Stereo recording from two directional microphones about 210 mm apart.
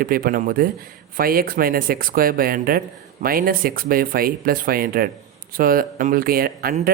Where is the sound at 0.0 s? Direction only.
45° right (ahead or behind).